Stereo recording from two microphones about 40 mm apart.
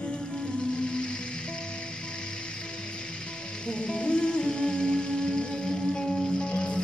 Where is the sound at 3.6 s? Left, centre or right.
Left.